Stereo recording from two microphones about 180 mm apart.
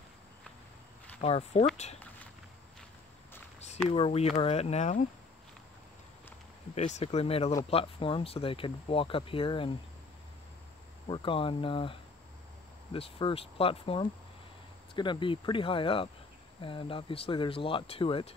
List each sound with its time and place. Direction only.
1.2 s speech: 35° left (ahead or behind)
3.9 s speech: 35° left (ahead or behind)
6.7 s speech: 40° left (ahead or behind)
11.1 s speech: 30° left (ahead or behind)